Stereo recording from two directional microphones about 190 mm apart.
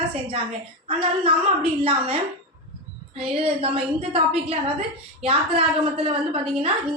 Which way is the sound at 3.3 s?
30° right (ahead or behind).